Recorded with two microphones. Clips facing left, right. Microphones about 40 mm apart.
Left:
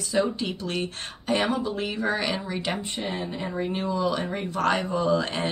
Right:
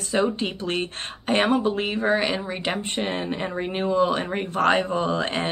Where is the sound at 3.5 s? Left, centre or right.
Right.